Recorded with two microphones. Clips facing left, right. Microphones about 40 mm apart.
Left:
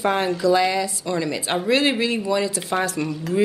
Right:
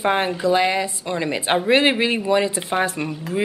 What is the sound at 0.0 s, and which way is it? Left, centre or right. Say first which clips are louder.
A woman's voice: even; right.